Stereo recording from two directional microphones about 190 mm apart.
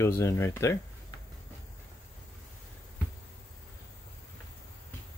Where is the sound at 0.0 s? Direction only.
15° left (ahead or behind).